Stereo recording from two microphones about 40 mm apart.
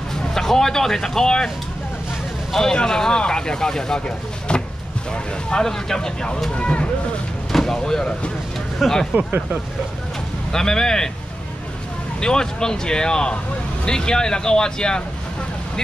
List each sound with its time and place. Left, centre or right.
0.1 s speech: centre
2.5 s speech: centre
4.5 s speech: left
6.5 s speech: left
7.5 s speech: centre
8.8 s speech: centre
10.5 s speech: centre
12.2 s speech: centre